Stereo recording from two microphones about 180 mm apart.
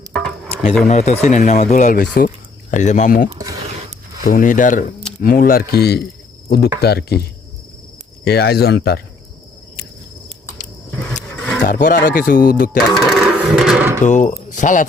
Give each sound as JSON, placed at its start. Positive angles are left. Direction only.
{"t": 0.1, "sound": "a sound", "side_deg": 5}
{"t": 0.9, "sound": "speech", "side_deg": 40}
{"t": 11.1, "sound": "roaring cats", "side_deg": 5}
{"t": 11.6, "sound": "speech", "side_deg": 50}
{"t": 13.0, "sound": "a sound", "side_deg": 0}
{"t": 14.0, "sound": "speech", "side_deg": 45}